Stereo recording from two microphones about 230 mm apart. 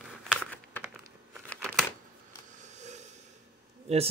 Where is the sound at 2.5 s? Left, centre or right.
Right.